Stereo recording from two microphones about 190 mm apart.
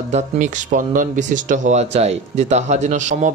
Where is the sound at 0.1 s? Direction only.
40° right (ahead or behind).